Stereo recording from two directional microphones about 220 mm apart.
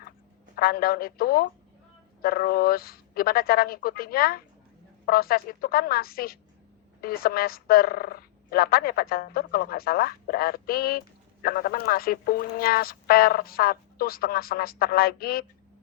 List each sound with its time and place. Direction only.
0.5 s speech: 45° left (ahead or behind)